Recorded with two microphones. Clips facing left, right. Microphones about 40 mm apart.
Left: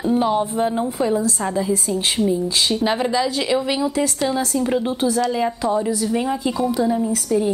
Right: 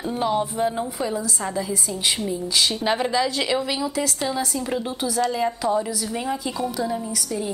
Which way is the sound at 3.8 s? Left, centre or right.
Centre.